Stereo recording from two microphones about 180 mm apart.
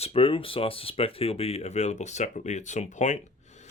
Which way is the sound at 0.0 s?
30° left (ahead or behind).